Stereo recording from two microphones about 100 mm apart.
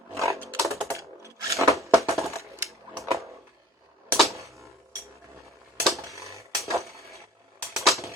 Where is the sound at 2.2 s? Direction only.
30° right (ahead or behind).